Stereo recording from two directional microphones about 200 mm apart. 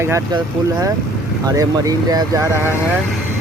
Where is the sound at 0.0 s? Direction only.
15° right (ahead or behind).